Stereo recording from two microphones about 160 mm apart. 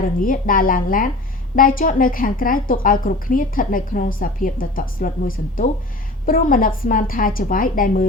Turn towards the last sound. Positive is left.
turn(degrees=60)  # may be behind; listen again after turning